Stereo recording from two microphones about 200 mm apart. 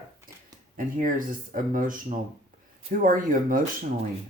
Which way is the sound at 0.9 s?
45° right (ahead or behind).